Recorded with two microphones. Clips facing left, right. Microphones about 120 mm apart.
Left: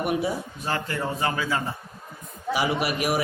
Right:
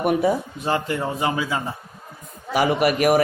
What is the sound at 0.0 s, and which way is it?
Speech, 50° right (ahead or behind).